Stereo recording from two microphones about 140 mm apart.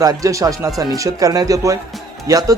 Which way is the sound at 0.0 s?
25° right (ahead or behind).